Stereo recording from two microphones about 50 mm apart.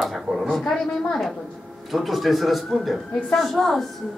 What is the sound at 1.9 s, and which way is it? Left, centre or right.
Speech, centre.